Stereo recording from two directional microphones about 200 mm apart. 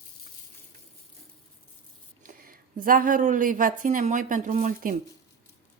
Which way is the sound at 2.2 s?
45° right (ahead or behind).